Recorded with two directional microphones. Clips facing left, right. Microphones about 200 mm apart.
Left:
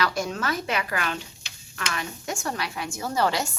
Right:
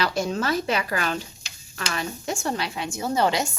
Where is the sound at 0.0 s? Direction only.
25° right (ahead or behind).